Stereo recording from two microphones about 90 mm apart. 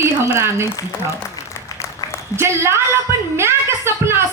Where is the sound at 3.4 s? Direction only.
30° right (ahead or behind).